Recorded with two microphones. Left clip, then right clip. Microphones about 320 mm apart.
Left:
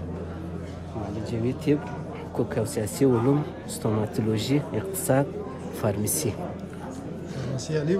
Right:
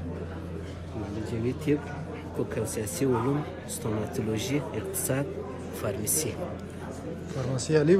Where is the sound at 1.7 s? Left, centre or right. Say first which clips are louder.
Left 3 dB; left.